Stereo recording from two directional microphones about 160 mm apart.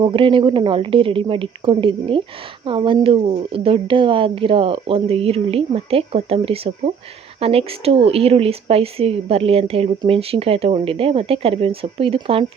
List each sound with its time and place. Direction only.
0.0 s speech: 30° right (ahead or behind)